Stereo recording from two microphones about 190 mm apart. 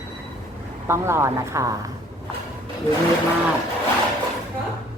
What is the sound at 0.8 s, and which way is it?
Speech, 15° right (ahead or behind).